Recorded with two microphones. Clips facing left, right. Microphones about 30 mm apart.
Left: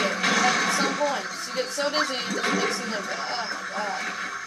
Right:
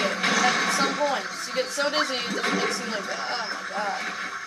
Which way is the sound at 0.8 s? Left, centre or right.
Right.